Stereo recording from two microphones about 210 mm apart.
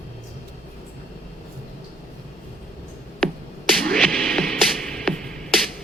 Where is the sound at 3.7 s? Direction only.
5° left (ahead or behind).